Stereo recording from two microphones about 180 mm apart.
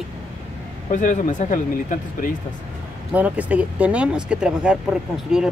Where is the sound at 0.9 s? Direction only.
45° left (ahead or behind).